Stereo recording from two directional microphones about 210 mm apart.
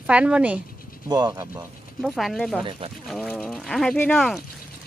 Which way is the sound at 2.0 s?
Centre (ahead or behind).